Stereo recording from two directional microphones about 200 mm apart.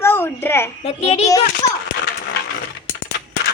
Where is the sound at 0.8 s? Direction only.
30° left (ahead or behind).